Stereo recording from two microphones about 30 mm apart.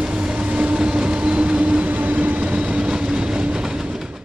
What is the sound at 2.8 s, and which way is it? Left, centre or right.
Train, right.